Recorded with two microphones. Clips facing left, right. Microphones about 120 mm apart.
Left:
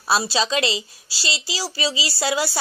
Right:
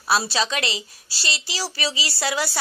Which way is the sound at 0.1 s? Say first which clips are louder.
Left 2 dB; 25° left (ahead or behind).